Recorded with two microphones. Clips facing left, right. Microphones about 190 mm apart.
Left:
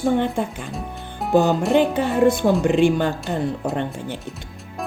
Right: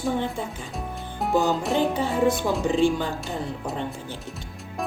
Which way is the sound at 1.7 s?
65° left (ahead or behind).